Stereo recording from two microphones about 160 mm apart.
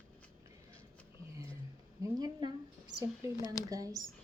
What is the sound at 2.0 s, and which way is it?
Speech, 25° right (ahead or behind).